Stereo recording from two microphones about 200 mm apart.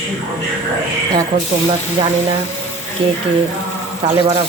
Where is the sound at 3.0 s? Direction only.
30° right (ahead or behind).